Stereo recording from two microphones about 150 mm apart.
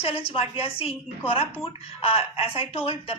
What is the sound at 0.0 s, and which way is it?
Speech, 40° left (ahead or behind).